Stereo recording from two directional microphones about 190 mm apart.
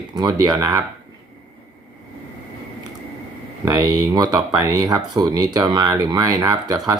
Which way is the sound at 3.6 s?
20° right (ahead or behind).